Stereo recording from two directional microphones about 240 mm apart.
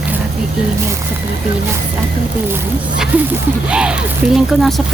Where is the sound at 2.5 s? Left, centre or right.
Centre.